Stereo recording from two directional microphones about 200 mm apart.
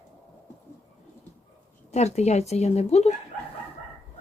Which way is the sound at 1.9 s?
35° left (ahead or behind).